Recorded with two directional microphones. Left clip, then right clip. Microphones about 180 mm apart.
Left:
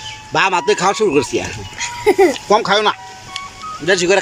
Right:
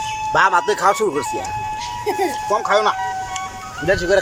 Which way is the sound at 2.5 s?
20° left (ahead or behind).